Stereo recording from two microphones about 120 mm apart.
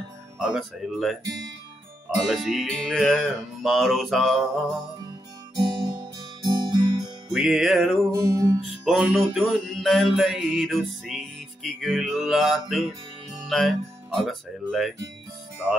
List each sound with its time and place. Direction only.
0.4 s mantra: 5° right (ahead or behind)
2.2 s mantra: centre (ahead or behind)
6.4 s music: 35° right (ahead or behind)
7.3 s mantra: centre (ahead or behind)
8.2 s music: 25° right (ahead or behind)
8.5 s music: centre (ahead or behind)
9.1 s mantra: centre (ahead or behind)